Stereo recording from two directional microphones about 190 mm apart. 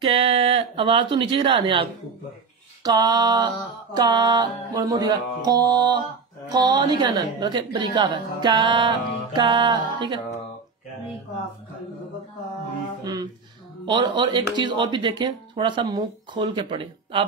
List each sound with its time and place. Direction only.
0.0 s a woman's voice: 30° right (ahead or behind)
13.0 s a sound: 20° right (ahead or behind)
13.8 s a woman's voice: 25° right (ahead or behind)